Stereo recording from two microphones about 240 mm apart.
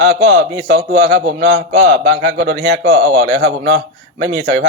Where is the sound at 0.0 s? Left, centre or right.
Right.